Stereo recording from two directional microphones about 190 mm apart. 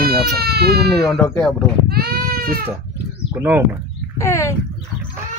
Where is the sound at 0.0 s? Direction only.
55° right (ahead or behind).